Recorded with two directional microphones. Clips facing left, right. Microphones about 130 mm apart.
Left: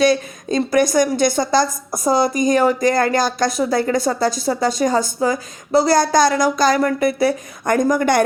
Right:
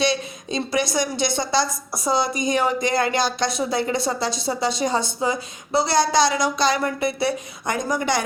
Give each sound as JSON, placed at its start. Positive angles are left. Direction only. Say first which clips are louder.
{"t": 0.0, "sound": "a woman's voice", "louder": "left 7 dB", "side_deg": 45}